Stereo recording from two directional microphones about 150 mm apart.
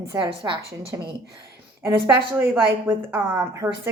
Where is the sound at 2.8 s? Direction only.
10° right (ahead or behind).